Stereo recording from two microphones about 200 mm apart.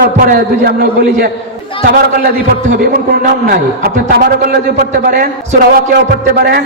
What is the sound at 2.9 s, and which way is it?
A man's voice, 45° right (ahead or behind).